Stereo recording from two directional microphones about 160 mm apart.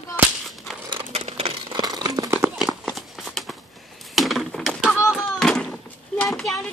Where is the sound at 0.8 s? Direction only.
35° right (ahead or behind).